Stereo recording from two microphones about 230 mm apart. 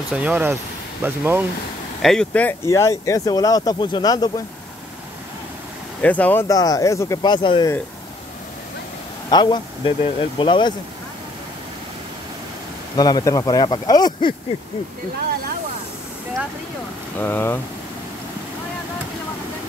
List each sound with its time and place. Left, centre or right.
0.1 s speech: centre
2.0 s speech: centre
6.0 s speech: centre
9.3 s speech: centre
12.9 s speech: centre
17.2 s speech: centre